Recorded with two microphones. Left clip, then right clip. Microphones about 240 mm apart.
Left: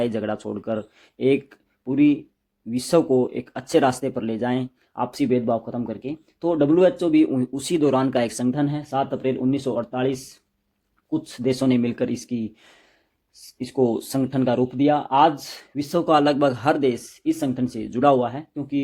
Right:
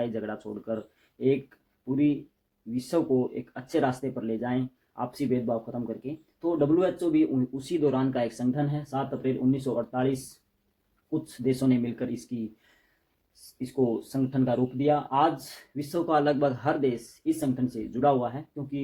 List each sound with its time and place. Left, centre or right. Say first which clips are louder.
0.0 s speech: left 7 dB; left
11.4 s speech: left 5 dB; left
13.6 s speech: left 6 dB; left